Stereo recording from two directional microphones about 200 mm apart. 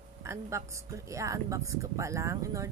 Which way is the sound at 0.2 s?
15° right (ahead or behind).